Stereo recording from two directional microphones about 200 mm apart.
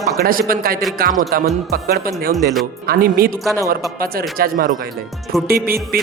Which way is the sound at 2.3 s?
Centre (ahead or behind).